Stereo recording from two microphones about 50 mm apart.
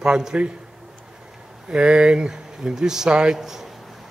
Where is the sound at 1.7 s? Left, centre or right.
Right.